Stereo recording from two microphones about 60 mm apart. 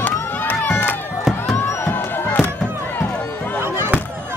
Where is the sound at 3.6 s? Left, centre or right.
Right.